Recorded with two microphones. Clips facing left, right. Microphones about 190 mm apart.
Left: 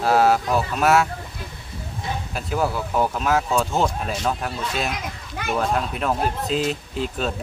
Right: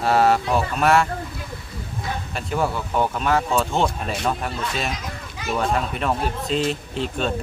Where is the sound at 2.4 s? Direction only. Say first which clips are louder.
Even; 5° left (ahead or behind).